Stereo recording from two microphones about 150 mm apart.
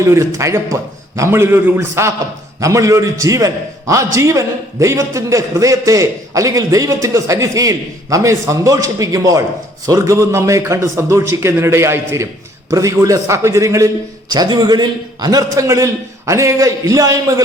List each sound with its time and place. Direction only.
0.0 s a man's voice: 20° right (ahead or behind)